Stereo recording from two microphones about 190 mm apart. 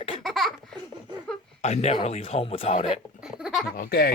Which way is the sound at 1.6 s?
35° left (ahead or behind).